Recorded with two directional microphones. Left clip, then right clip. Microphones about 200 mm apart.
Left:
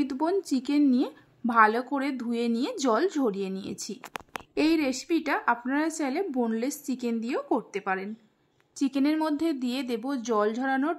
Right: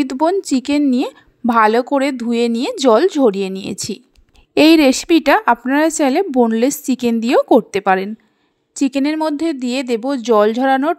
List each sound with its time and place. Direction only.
0.0 s a woman's voice: 35° right (ahead or behind)